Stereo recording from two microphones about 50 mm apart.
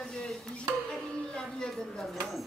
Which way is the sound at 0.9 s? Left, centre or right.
Centre.